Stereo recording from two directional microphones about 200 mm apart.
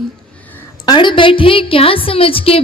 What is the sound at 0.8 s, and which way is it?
A woman's voice, 20° left (ahead or behind).